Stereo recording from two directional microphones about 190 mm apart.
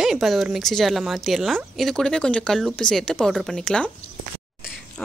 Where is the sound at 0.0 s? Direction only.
Centre (ahead or behind).